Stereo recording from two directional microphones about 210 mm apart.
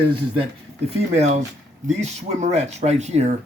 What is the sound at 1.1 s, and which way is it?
Speech, 30° right (ahead or behind).